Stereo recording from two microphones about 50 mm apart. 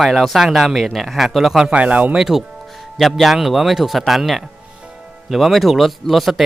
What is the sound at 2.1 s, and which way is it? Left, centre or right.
Speech, centre.